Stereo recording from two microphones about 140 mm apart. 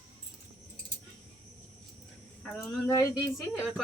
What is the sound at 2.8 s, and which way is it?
Speech, 25° left (ahead or behind).